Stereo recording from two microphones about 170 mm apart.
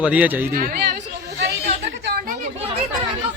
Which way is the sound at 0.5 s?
60° right (ahead or behind).